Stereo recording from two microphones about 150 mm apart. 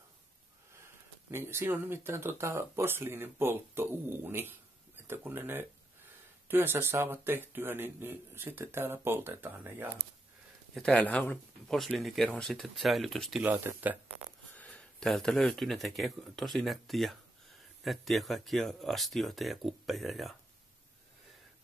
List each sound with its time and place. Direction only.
1.3 s speech: 15° right (ahead or behind)
10.7 s speech: 5° left (ahead or behind)
13.5 s speech: 10° right (ahead or behind)
14.5 s speech: 10° left (ahead or behind)